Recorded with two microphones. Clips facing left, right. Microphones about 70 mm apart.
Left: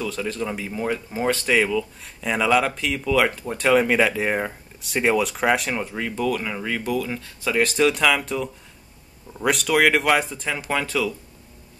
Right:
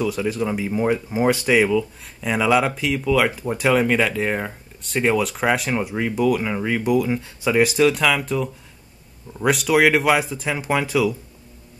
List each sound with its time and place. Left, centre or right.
0.0 s speech: centre